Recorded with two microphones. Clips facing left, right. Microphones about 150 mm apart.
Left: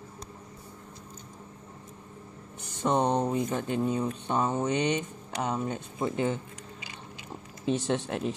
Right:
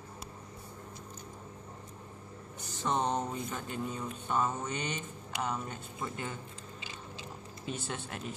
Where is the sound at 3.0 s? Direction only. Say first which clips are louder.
Left 6 dB; 15° left (ahead or behind).